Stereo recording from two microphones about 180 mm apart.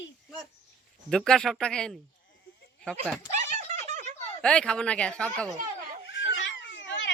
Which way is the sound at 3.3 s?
40° right (ahead or behind).